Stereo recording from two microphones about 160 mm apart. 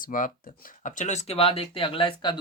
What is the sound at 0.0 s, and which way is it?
Speech, 60° left (ahead or behind).